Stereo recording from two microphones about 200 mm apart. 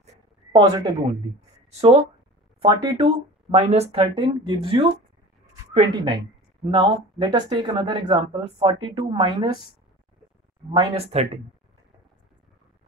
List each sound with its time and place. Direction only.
0.6 s speech: 20° right (ahead or behind)
10.7 s speech: 25° right (ahead or behind)